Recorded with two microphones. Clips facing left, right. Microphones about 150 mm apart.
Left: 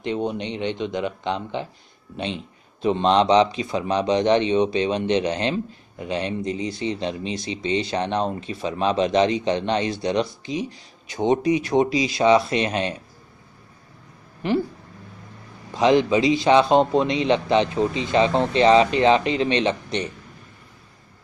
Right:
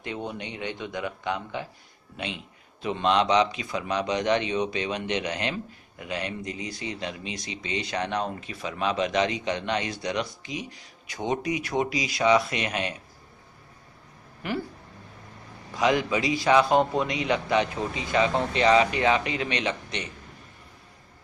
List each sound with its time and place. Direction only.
0.0 s speech: 20° left (ahead or behind)
14.4 s speech: 25° left (ahead or behind)
15.7 s speech: 25° left (ahead or behind)